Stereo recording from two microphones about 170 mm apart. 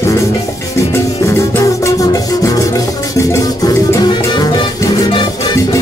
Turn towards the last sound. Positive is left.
turn(degrees=25)  # may be behind; listen again after turning